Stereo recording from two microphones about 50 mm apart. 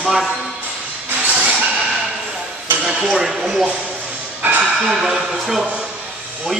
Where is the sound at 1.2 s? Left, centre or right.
Right.